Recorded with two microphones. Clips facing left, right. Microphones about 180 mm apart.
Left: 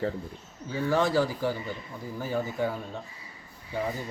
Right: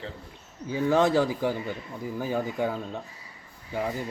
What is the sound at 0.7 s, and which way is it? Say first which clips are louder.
Speech: right 3 dB; 20° right (ahead or behind).